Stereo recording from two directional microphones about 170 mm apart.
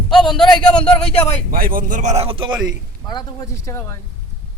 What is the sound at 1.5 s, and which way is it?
A man's voice, 55° right (ahead or behind).